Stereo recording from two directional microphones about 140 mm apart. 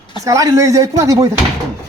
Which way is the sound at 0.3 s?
25° right (ahead or behind).